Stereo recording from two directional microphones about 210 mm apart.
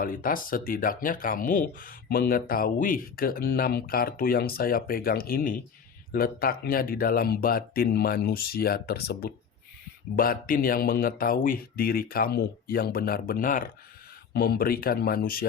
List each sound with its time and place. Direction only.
0.0 s speech: 40° left (ahead or behind)